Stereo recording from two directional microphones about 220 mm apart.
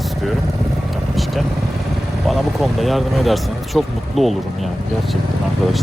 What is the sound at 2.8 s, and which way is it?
Speech, centre (ahead or behind).